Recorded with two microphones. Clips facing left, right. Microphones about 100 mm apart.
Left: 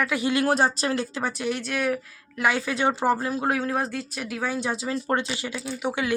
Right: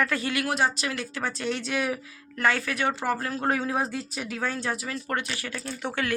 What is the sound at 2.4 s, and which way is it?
Speech, 15° left (ahead or behind).